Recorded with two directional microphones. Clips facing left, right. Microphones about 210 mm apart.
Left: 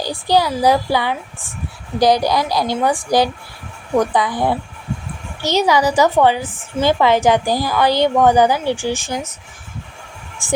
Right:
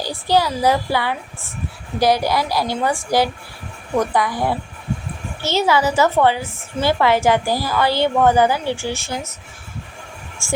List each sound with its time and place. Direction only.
0.0 s a woman's voice: 15° left (ahead or behind)
10.4 s a woman's voice: 15° left (ahead or behind)